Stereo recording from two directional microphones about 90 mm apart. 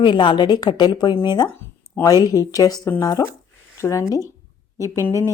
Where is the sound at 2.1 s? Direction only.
40° left (ahead or behind).